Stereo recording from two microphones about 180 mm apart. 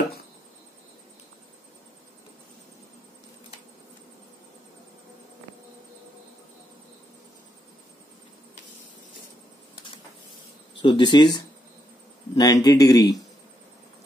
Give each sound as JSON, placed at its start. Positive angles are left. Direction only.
{"t": 10.8, "sound": "speech", "side_deg": 25}
{"t": 12.4, "sound": "speech", "side_deg": 20}